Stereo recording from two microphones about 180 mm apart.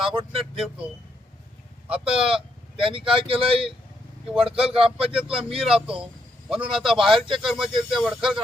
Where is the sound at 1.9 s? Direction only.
30° right (ahead or behind).